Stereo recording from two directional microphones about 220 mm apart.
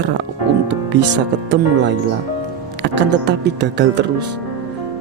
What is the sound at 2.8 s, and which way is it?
Speech, 50° right (ahead or behind).